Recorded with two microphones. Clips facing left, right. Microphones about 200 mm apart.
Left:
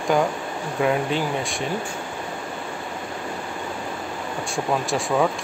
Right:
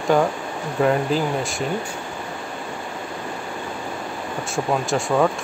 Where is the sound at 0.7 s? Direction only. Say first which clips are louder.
Right 3 dB; centre (ahead or behind).